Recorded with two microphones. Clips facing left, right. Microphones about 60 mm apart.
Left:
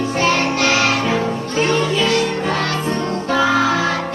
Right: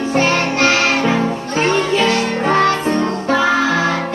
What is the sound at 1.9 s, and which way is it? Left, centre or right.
Music, right.